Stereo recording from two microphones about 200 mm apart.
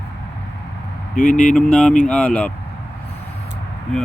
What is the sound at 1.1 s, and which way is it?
Speech, 40° left (ahead or behind).